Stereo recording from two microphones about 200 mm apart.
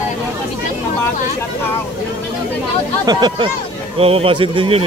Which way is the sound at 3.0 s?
20° right (ahead or behind).